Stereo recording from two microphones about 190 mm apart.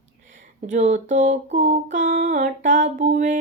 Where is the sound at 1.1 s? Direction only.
45° right (ahead or behind).